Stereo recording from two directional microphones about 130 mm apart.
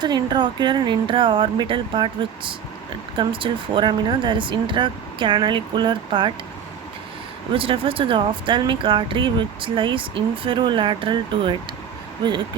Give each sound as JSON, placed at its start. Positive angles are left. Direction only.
{"t": 0.0, "sound": "speech", "side_deg": -35}
{"t": 7.5, "sound": "speech", "side_deg": -45}